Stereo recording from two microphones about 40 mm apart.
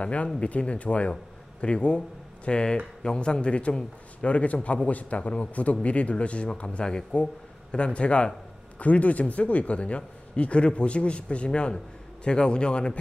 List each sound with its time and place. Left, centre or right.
0.0 s speech: left